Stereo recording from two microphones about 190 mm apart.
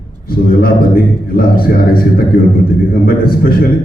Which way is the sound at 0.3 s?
50° left (ahead or behind).